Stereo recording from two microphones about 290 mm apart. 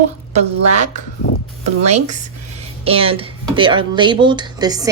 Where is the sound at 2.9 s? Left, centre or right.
Centre.